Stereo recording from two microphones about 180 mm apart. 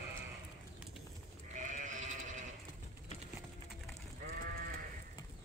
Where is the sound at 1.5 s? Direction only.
45° right (ahead or behind).